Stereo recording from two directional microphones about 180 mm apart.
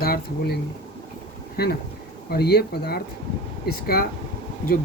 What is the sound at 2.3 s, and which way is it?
Speech, 60° left (ahead or behind).